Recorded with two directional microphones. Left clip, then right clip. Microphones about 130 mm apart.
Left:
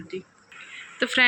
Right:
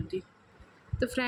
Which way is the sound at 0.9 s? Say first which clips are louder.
Left 7 dB; 5° right (ahead or behind).